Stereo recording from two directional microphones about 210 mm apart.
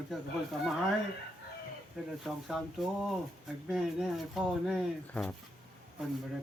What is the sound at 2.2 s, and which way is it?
Speech, centre (ahead or behind).